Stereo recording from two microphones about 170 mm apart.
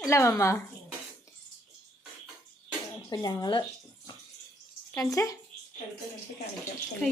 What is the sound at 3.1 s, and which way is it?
Speech, 25° left (ahead or behind).